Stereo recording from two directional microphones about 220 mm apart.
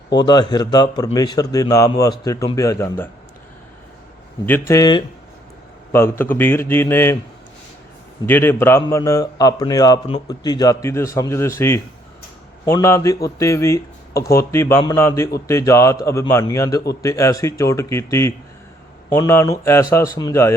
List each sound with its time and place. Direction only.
0.3 s a man's voice: 20° left (ahead or behind)
4.7 s a man's voice: 20° left (ahead or behind)
8.3 s a man's voice: 10° left (ahead or behind)